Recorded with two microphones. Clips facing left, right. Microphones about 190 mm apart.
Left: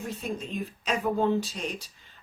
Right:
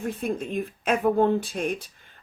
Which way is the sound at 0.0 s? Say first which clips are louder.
Right 5 dB; 55° right (ahead or behind).